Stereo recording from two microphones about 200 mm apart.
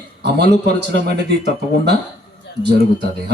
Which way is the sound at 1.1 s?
55° right (ahead or behind).